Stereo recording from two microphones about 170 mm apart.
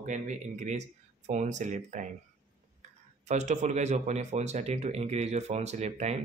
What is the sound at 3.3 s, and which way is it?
Speech, 45° right (ahead or behind).